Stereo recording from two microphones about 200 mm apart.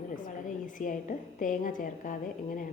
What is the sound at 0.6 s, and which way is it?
A woman's voice, 40° left (ahead or behind).